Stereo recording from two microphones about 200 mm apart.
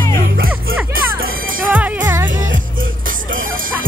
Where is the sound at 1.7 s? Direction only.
10° right (ahead or behind).